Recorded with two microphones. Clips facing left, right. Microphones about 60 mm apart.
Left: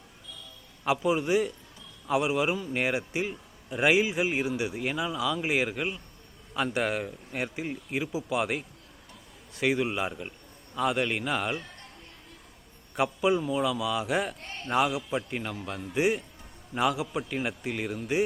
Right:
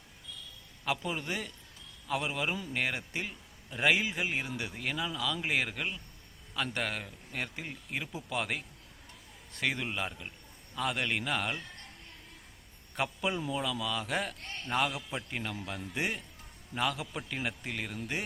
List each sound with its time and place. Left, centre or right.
0.9 s a man's voice: centre
13.0 s a man's voice: centre